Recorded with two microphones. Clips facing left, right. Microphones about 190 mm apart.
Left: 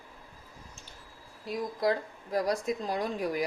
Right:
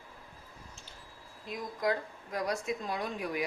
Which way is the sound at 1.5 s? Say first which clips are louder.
Left 4 dB; 35° left (ahead or behind).